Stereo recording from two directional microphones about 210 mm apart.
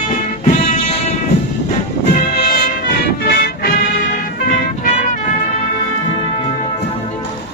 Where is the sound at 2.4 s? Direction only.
45° left (ahead or behind).